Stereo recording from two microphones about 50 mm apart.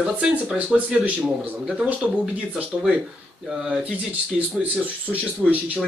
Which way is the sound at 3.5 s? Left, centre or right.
Centre.